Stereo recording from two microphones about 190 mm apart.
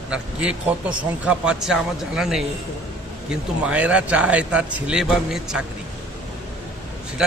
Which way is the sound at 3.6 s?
5° right (ahead or behind).